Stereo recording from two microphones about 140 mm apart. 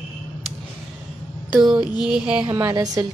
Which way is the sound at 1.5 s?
5° right (ahead or behind).